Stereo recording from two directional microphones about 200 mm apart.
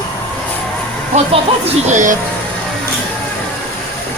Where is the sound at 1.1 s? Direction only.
35° right (ahead or behind).